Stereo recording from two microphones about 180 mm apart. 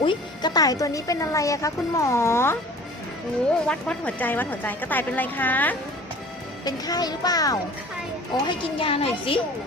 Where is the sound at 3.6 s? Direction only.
5° left (ahead or behind).